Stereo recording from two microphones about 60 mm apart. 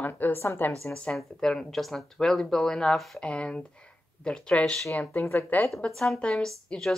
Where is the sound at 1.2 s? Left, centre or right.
Centre.